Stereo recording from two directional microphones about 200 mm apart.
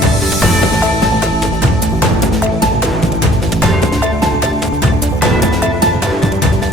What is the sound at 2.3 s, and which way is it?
Music, centre (ahead or behind).